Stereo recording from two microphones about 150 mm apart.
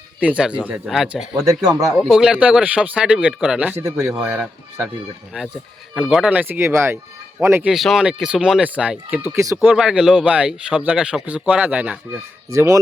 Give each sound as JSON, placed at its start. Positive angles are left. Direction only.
{"t": 0.2, "sound": "speech", "side_deg": -10}
{"t": 4.1, "sound": "speech", "side_deg": -5}
{"t": 6.1, "sound": "speech", "side_deg": -5}
{"t": 7.7, "sound": "speech", "side_deg": 0}
{"t": 9.3, "sound": "speech", "side_deg": -20}
{"t": 9.6, "sound": "speech", "side_deg": -5}
{"t": 12.5, "sound": "speech", "side_deg": -20}